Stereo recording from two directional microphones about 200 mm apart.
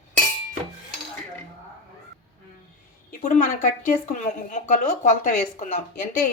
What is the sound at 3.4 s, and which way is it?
A woman's voice, 40° left (ahead or behind).